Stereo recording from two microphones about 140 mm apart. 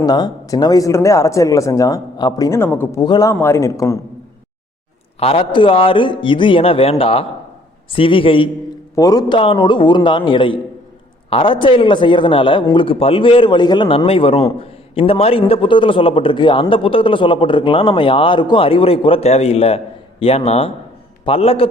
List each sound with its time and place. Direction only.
0.0 s speech: 30° left (ahead or behind)
3.0 s speech: 30° left (ahead or behind)
5.2 s a man's voice: 40° left (ahead or behind)
9.0 s speech: 25° left (ahead or behind)
9.4 s a man's voice: 35° left (ahead or behind)